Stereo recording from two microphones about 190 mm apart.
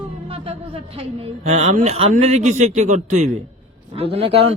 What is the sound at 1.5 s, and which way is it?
Speech, 35° right (ahead or behind).